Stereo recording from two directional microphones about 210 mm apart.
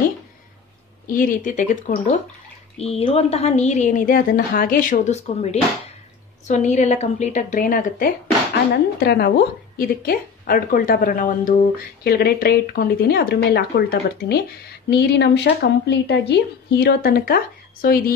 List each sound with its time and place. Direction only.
1.0 s a woman's voice: 40° left (ahead or behind)
2.8 s a woman's voice: 25° left (ahead or behind); by 18.1 s 45° left (ahead or behind)